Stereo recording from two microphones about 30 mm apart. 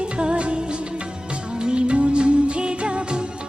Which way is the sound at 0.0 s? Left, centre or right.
Right.